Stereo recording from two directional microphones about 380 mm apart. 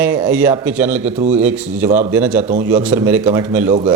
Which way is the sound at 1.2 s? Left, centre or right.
Centre.